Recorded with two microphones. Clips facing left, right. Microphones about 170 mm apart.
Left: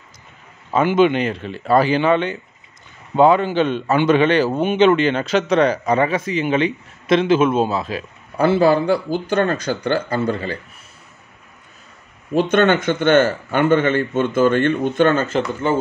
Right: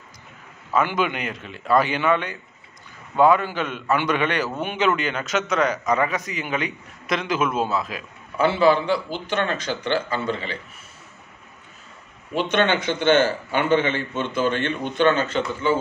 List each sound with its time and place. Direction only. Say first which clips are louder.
0.7 s a man's voice: left 7 dB; 25° left (ahead or behind)
8.4 s a man's voice: left 3 dB; 45° left (ahead or behind)
12.4 s a man's voice: left 6 dB; 45° left (ahead or behind)